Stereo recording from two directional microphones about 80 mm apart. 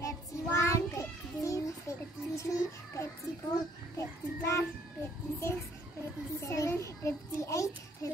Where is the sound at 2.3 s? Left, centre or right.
Left.